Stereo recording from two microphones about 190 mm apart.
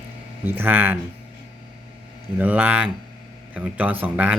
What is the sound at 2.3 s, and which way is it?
Speech, 10° right (ahead or behind).